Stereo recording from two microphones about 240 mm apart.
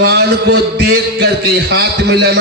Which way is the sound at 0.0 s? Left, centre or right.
Right.